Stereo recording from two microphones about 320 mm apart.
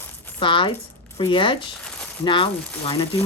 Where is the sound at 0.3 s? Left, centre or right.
Centre.